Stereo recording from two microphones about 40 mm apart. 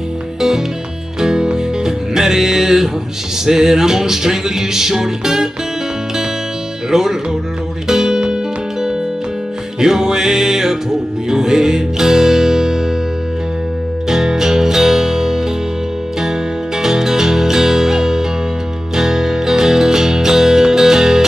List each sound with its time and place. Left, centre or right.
1.2 s music: centre
6.9 s music: centre
9.8 s music: centre
14.0 s music: centre